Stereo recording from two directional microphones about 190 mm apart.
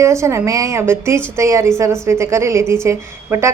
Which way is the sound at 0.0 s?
15° right (ahead or behind).